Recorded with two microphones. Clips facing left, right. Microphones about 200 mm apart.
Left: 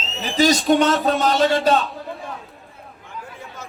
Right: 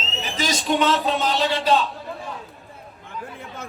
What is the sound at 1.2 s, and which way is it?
Speech, 45° left (ahead or behind).